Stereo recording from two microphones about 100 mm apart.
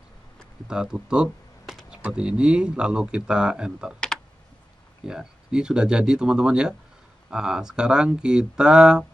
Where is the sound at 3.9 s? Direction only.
5° left (ahead or behind).